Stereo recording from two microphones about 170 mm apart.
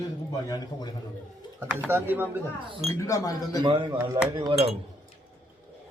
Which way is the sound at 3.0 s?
20° left (ahead or behind).